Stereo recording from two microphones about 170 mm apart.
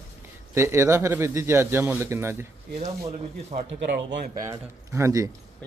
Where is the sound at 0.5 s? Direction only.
15° right (ahead or behind).